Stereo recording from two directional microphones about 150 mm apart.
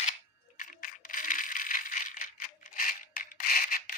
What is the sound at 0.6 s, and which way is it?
Rattle, 65° left (ahead or behind).